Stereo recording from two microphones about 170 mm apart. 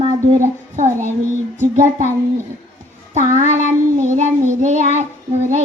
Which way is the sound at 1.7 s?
45° right (ahead or behind).